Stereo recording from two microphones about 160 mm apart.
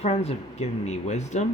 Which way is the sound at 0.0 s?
40° left (ahead or behind).